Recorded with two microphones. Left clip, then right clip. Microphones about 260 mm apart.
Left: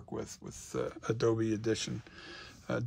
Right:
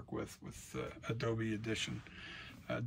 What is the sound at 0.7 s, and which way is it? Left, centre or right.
Speech, centre.